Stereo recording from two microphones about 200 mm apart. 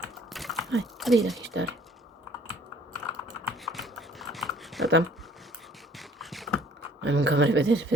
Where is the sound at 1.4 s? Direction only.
65° right (ahead or behind).